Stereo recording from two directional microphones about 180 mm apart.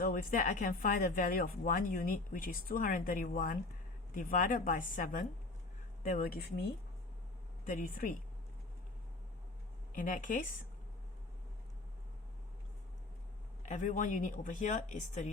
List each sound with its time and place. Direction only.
0.0 s a woman's voice: 55° left (ahead or behind)
7.7 s a woman's voice: 50° left (ahead or behind)
9.9 s a woman's voice: 50° left (ahead or behind)
13.6 s a woman's voice: 45° left (ahead or behind)